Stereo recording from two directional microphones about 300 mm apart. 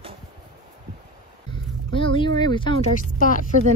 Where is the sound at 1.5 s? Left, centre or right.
Centre.